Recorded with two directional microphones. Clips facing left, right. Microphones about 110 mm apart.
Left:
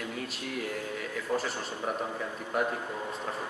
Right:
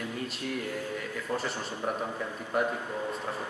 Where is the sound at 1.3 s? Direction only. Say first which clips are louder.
Left 2 dB; 10° left (ahead or behind).